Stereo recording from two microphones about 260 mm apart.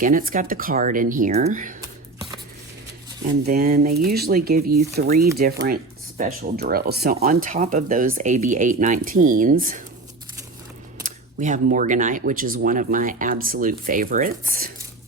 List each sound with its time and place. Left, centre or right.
0.0 s speech: right
3.4 s speech: right
11.0 s speech: right